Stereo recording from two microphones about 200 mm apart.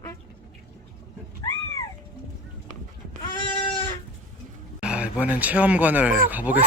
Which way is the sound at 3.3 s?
25° left (ahead or behind).